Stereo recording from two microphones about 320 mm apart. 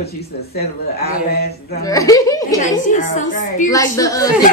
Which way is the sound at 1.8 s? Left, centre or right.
Centre.